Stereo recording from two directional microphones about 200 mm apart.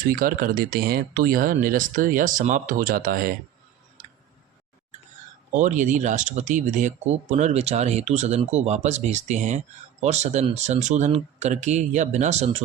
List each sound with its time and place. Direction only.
0.1 s speech: 45° right (ahead or behind)
5.5 s speech: 35° right (ahead or behind)